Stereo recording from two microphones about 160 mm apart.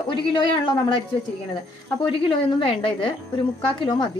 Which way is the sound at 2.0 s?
30° left (ahead or behind).